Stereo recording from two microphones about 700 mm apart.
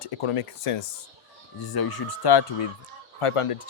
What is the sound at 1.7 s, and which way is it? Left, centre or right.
Speech, left.